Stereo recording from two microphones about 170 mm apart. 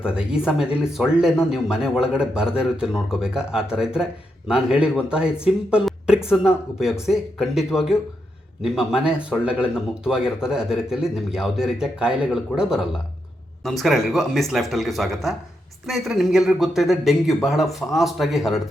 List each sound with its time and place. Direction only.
0.0 s speech: 5° right (ahead or behind)